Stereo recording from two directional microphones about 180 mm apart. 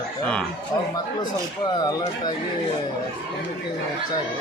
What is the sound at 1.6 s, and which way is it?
Speech, 25° left (ahead or behind).